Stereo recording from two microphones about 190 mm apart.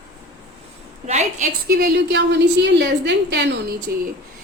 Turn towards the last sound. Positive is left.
turn(degrees=-55)  # may be behind; listen again after turning